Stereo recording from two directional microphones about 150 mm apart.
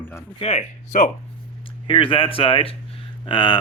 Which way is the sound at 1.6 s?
35° left (ahead or behind).